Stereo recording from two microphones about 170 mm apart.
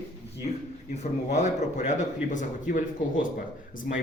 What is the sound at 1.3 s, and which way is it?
A man's voice, 45° left (ahead or behind).